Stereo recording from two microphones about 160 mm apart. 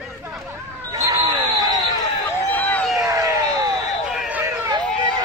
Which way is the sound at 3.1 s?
20° right (ahead or behind).